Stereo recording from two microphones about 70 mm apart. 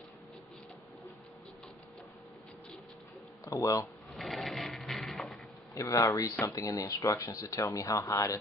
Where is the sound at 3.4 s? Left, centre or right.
Left.